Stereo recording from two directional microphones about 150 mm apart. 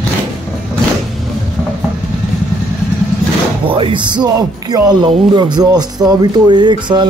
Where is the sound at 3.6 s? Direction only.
35° right (ahead or behind).